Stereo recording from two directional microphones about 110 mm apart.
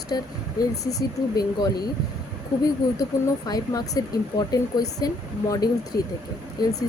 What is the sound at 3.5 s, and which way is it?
Speech, 35° left (ahead or behind).